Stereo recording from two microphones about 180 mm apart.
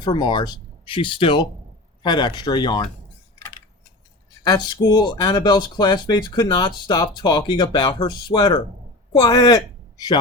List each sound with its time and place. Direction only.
0.0 s speech: 25° left (ahead or behind)
4.4 s a man's voice: 20° left (ahead or behind)